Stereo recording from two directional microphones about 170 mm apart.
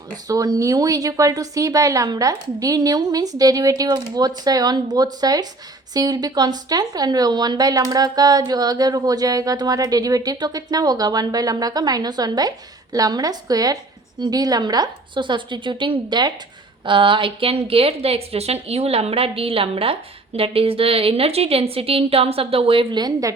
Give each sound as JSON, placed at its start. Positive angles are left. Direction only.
{"t": 0.3, "sound": "a woman's voice", "side_deg": -20}